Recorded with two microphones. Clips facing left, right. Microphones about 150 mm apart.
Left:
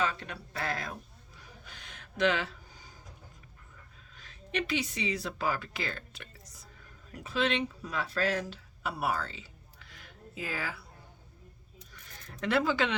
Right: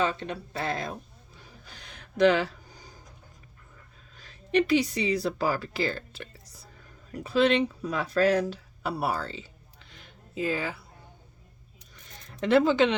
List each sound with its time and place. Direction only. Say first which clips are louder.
0.0 s speech: right 5 dB; 25° right (ahead or behind)
1.4 s a sound: right 1 dB; 35° right (ahead or behind)
4.1 s a woman's voice: right 11 dB; 35° right (ahead or behind)
11.9 s zipper: right 6 dB; 25° right (ahead or behind)